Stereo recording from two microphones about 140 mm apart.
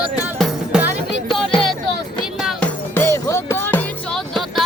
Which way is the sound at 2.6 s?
15° left (ahead or behind).